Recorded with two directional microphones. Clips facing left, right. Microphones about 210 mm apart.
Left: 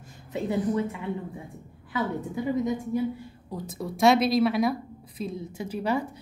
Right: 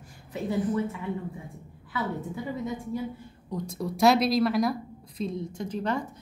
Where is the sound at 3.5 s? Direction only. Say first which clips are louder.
Right 2 dB; 5° left (ahead or behind).